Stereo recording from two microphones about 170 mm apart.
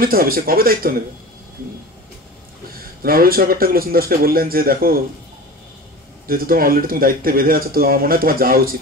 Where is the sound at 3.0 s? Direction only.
60° right (ahead or behind).